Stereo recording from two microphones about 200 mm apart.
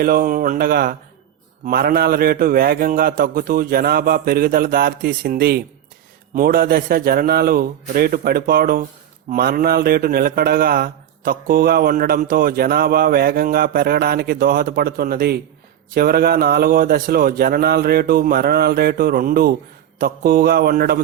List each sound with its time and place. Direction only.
0.0 s speech: 45° right (ahead or behind)